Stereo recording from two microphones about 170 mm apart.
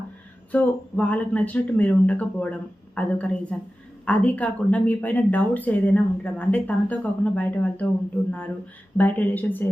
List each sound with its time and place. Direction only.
0.5 s speech: 10° left (ahead or behind)
9.0 s speech: 10° left (ahead or behind)